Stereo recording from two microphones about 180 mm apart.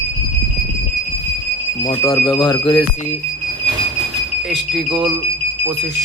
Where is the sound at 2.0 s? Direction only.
20° left (ahead or behind).